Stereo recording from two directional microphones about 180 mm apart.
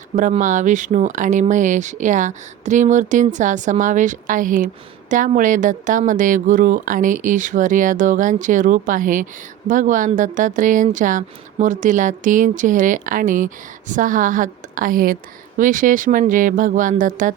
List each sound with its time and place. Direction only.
0.2 s speech: 45° right (ahead or behind)